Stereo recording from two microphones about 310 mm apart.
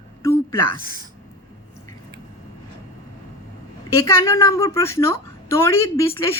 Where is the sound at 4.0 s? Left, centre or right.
Centre.